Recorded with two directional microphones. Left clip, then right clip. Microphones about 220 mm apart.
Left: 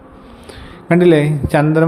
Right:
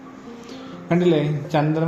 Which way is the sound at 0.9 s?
30° left (ahead or behind).